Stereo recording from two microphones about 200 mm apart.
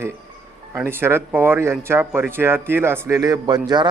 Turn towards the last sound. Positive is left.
turn(degrees=-20)  # may be behind; listen again after turning